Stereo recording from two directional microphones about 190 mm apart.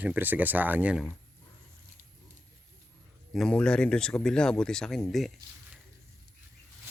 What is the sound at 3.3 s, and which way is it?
Speech, 5° left (ahead or behind).